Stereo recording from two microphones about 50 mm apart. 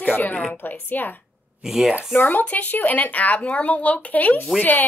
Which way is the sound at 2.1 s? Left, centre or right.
Left.